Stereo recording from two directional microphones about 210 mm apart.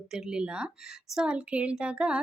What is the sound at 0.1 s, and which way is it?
A woman's voice, 5° right (ahead or behind).